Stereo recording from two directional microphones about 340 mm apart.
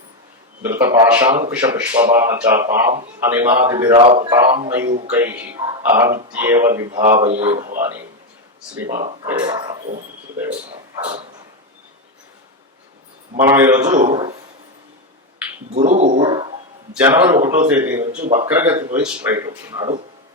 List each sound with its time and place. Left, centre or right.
0.6 s speech: centre
4.9 s speech: right
5.1 s speech: centre
7.8 s speech: centre
8.9 s speech: right
9.2 s speech: centre
13.4 s speech: centre
15.7 s speech: centre